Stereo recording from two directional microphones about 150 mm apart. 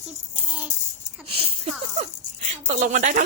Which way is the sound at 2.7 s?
55° right (ahead or behind).